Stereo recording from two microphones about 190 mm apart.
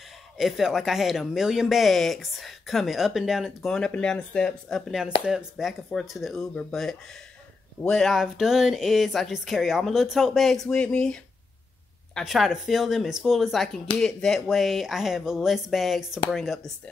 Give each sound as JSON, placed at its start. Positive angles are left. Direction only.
{"t": 0.4, "sound": "speech", "side_deg": 0}